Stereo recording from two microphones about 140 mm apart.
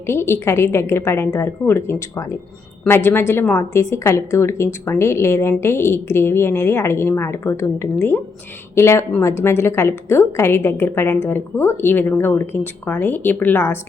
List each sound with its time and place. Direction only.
0.1 s a woman's voice: 20° left (ahead or behind)